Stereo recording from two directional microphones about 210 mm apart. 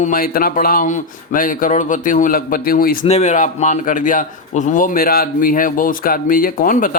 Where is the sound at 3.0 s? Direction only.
30° left (ahead or behind).